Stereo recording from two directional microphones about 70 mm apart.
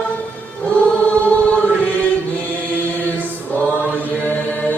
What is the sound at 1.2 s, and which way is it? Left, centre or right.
Choir, left.